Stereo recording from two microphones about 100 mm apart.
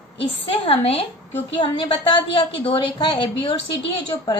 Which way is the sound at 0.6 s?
85° left.